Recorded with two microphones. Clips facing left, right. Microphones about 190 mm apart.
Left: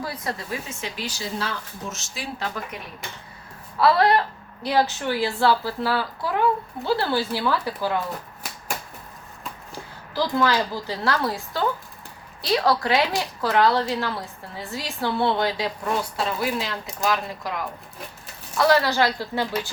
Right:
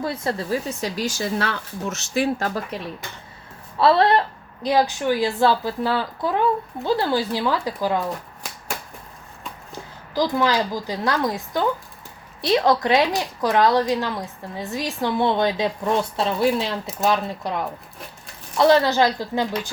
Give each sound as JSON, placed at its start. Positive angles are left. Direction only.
{"t": 0.0, "sound": "speech", "side_deg": -25}
{"t": 2.7, "sound": "speech", "side_deg": -30}
{"t": 4.6, "sound": "speech", "side_deg": -15}
{"t": 9.7, "sound": "a woman's voice", "side_deg": -15}